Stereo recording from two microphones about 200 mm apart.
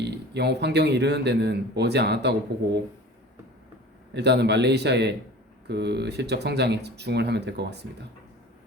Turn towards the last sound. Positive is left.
turn(degrees=-55)  # may be behind; listen again after turning